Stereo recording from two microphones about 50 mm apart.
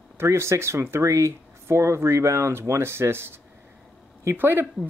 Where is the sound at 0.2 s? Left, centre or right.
Right.